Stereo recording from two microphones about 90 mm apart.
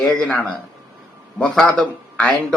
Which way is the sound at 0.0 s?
5° left (ahead or behind).